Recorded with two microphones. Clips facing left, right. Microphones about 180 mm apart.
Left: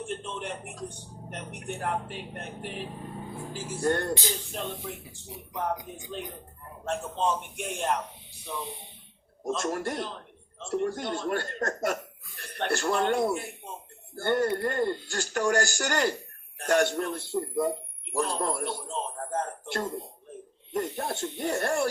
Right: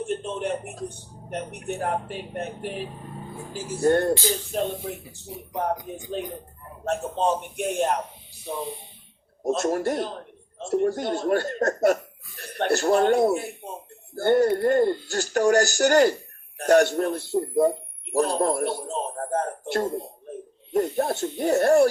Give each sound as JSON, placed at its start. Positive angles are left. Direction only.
{"t": 0.0, "sound": "a man's voice", "side_deg": -40}
{"t": 6.8, "sound": "a man's voice", "side_deg": -40}
{"t": 9.5, "sound": "a man's voice", "side_deg": -40}